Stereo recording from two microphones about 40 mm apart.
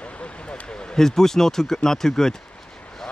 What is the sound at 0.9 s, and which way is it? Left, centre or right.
Speech, centre.